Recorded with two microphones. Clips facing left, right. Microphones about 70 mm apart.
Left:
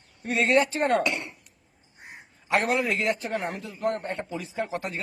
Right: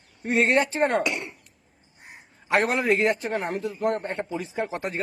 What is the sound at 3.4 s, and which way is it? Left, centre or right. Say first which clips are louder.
Speech: right 3 dB; right.